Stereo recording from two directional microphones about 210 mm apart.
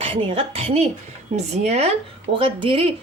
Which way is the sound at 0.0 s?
25° right (ahead or behind).